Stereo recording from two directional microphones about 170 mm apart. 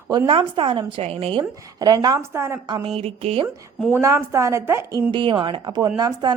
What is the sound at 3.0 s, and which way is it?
Speech, 35° right (ahead or behind).